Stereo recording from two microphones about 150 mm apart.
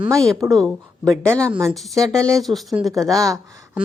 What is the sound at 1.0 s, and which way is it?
Speech, 20° right (ahead or behind).